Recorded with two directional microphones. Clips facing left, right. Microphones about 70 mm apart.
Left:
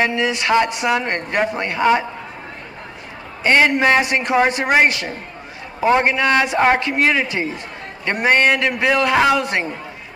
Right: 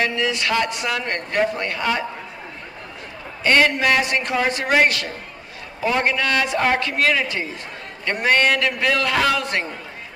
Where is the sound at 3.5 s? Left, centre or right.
Left.